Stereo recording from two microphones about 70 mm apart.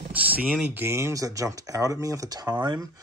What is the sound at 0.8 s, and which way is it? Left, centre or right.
Speech, right.